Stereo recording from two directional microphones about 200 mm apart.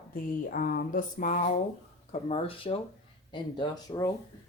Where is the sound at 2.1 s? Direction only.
30° left (ahead or behind).